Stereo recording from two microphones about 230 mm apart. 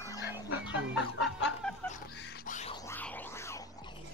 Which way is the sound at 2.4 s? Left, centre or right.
Left.